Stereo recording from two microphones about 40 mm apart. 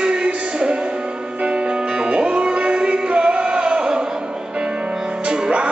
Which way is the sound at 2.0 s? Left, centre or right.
Right.